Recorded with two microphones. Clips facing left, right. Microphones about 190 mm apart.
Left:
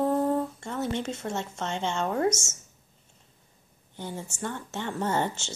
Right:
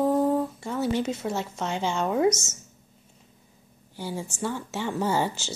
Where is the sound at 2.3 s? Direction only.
30° left (ahead or behind).